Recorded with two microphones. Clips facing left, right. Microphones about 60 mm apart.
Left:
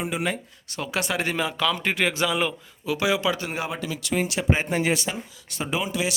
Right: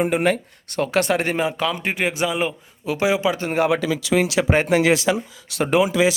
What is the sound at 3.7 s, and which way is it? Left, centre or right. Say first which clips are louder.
Speech: right 9 dB; right.